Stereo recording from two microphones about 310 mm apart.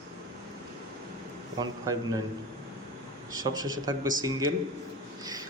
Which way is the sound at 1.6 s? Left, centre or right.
Centre.